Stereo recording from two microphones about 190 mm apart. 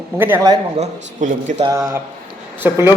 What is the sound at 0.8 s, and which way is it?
Speech, 40° right (ahead or behind).